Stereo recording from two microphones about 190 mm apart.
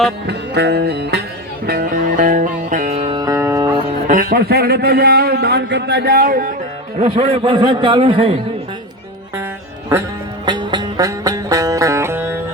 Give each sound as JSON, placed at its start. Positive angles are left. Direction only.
{"t": 0.3, "sound": "music", "side_deg": -60}
{"t": 3.8, "sound": "a man's voice", "side_deg": -45}
{"t": 6.9, "sound": "a man's voice", "side_deg": -35}
{"t": 10.4, "sound": "music", "side_deg": -25}